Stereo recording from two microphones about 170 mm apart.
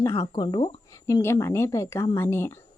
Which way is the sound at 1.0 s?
15° left (ahead or behind).